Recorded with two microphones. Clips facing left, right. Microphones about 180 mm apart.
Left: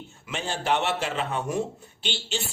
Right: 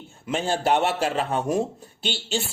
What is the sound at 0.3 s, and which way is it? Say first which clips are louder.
A man's voice: right 5 dB; 50° right (ahead or behind).